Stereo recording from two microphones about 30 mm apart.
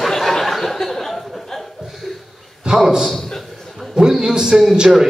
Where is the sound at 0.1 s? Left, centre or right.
Centre.